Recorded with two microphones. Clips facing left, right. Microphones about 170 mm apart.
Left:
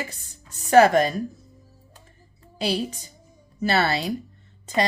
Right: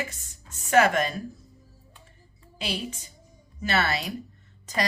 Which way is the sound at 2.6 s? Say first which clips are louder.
Left 7 dB; 35° left (ahead or behind).